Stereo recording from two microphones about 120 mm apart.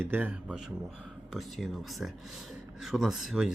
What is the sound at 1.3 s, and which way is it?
A man's voice, centre (ahead or behind).